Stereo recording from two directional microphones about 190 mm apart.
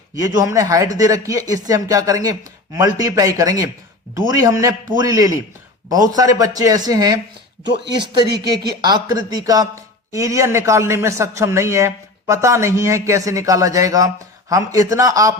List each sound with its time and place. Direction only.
0.2 s a man's voice: 15° right (ahead or behind)
7.6 s speech: 65° right (ahead or behind)
8.4 s a man's voice: 20° right (ahead or behind)